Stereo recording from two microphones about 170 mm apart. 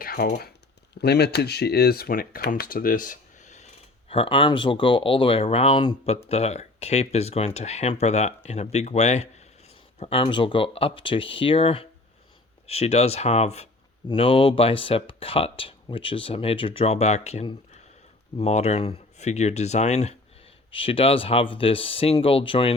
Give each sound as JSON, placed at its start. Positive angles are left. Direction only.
{"t": 0.0, "sound": "speech", "side_deg": 60}
{"t": 4.1, "sound": "speech", "side_deg": 30}